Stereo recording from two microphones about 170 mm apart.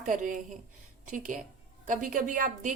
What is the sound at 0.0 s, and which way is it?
A woman's voice, 50° right (ahead or behind).